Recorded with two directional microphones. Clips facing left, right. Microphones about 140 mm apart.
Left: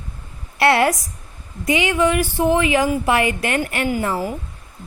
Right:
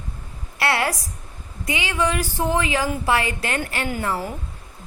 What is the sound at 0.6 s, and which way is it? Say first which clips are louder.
A woman's voice: left 7 dB; 20° left (ahead or behind).